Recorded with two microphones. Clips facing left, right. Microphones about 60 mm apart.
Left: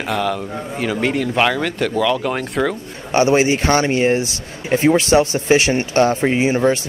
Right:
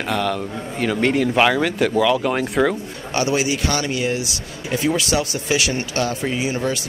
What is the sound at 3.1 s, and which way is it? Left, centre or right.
Speech, left.